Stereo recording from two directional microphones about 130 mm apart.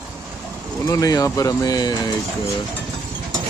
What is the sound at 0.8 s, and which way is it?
Speech, 25° left (ahead or behind).